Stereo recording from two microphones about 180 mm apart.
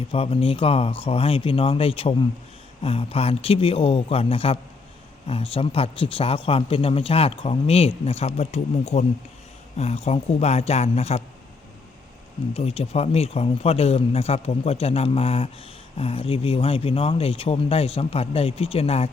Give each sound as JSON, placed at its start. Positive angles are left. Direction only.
{"t": 0.1, "sound": "speech", "side_deg": 35}
{"t": 12.5, "sound": "speech", "side_deg": 35}